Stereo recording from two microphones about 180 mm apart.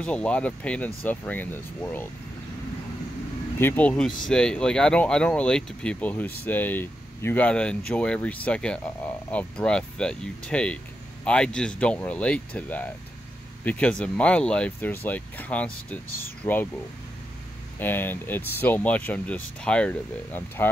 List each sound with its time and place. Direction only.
0.0 s speech: 5° left (ahead or behind)
3.5 s speech: 10° left (ahead or behind)
17.7 s speech: 10° left (ahead or behind)